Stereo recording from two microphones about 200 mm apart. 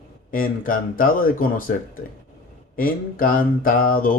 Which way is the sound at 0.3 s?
45° left (ahead or behind).